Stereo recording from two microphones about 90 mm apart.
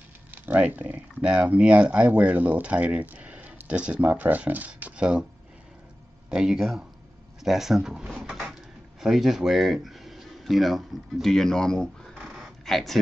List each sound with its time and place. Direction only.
0.3 s speech: 20° right (ahead or behind)
6.3 s speech: 5° right (ahead or behind)
8.3 s cupboard open or close: 5° right (ahead or behind)
9.0 s speech: centre (ahead or behind)
12.3 s a sound: centre (ahead or behind)